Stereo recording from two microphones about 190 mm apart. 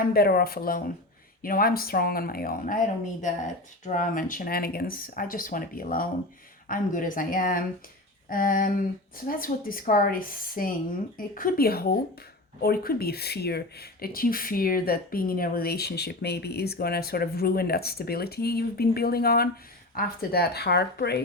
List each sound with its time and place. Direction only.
0.0 s speech: 55° left (ahead or behind)